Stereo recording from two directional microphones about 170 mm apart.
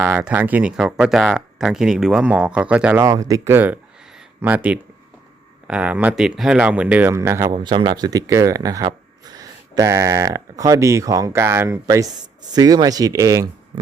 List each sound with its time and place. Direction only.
0.0 s speech: 10° right (ahead or behind)
3.0 s speech: 20° right (ahead or behind)